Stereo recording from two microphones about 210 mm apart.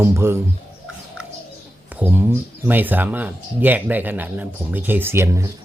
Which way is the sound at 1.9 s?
10° right (ahead or behind).